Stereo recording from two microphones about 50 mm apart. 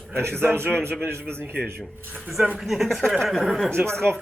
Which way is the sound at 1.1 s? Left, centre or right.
Right.